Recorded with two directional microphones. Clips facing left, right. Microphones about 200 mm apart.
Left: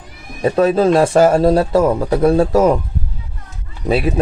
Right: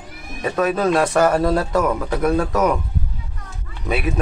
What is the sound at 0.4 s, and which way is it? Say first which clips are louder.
Speech: left 6 dB; 30° left (ahead or behind).